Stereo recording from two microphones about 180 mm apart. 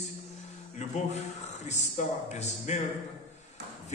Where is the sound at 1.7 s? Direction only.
40° left (ahead or behind).